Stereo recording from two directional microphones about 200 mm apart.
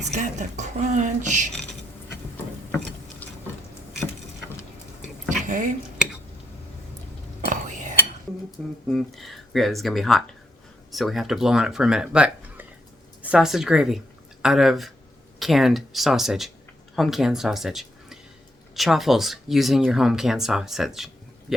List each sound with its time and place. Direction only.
0.0 s speech: 35° right (ahead or behind)
3.2 s a sound: 10° left (ahead or behind)
5.0 s a sound: 5° left (ahead or behind)
5.5 s speech: 40° right (ahead or behind)
7.5 s cutlery: 40° right (ahead or behind)
8.9 s speech: centre (ahead or behind)